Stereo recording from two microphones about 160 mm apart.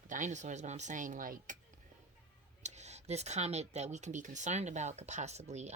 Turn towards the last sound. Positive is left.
turn(degrees=-45)  # may be behind; listen again after turning